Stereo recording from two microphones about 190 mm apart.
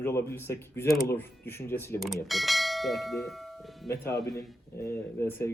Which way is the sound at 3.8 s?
15° left (ahead or behind).